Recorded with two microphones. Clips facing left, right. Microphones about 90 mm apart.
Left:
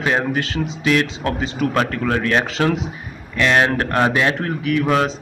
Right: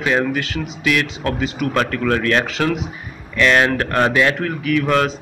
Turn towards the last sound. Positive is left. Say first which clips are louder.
# right 1 dB
turn(degrees=20)  # may be behind; listen again after turning